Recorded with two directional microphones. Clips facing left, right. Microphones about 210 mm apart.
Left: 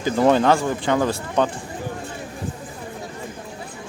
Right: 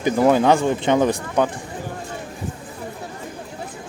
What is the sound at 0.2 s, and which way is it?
Speech, 10° right (ahead or behind).